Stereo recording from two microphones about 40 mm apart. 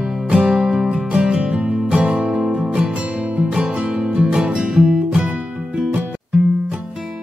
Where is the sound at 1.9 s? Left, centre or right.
Right.